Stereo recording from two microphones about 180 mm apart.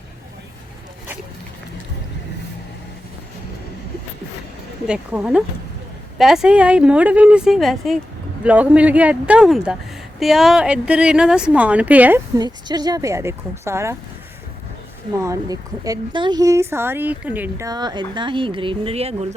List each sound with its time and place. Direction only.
4.9 s a woman's voice: 5° right (ahead or behind)
12.4 s a woman's voice: 20° right (ahead or behind)
15.2 s a woman's voice: 20° right (ahead or behind)
17.7 s speech: 25° right (ahead or behind)